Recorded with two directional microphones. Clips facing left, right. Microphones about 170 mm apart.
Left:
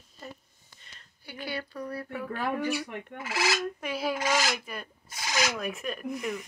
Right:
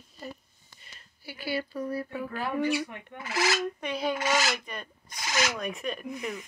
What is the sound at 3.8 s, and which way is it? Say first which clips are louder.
Speech: right 1 dB; 5° left (ahead or behind).